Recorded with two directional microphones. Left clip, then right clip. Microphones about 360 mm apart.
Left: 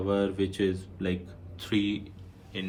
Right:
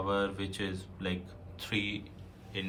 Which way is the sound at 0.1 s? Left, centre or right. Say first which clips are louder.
Left 6 dB; centre.